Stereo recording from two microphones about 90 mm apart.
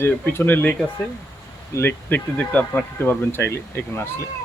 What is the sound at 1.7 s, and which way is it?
Speech, 20° left (ahead or behind).